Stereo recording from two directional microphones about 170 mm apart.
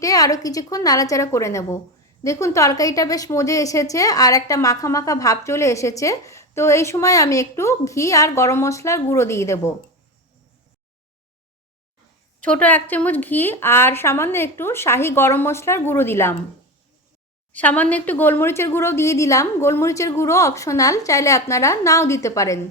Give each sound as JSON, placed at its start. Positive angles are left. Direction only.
{"t": 0.0, "sound": "a woman's voice", "side_deg": 20}
{"t": 12.4, "sound": "speech", "side_deg": 10}
{"t": 17.5, "sound": "speech", "side_deg": 10}